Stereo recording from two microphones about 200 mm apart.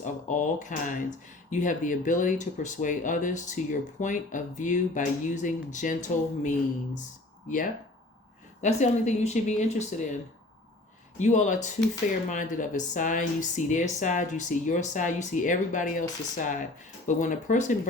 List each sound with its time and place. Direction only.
0.0 s a sound: 40° left (ahead or behind)
1.5 s speech: 40° left (ahead or behind)
8.6 s speech: 35° left (ahead or behind)
11.2 s speech: 35° left (ahead or behind)